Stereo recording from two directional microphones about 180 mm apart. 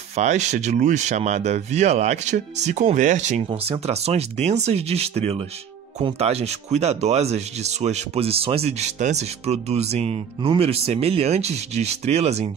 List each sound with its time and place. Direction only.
0.1 s speech: 40° right (ahead or behind)